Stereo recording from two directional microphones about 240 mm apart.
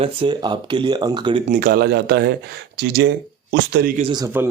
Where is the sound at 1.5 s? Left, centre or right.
Right.